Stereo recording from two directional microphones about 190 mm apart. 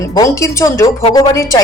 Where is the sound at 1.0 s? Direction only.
25° left (ahead or behind).